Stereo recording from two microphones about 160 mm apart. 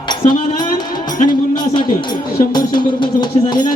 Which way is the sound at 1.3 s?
25° left (ahead or behind).